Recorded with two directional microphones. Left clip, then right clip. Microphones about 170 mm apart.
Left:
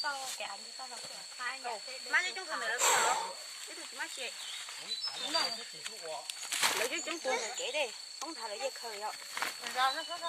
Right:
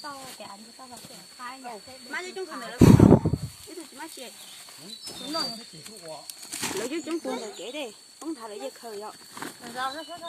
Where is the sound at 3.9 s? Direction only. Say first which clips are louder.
Left 3 dB; 75° right (ahead or behind).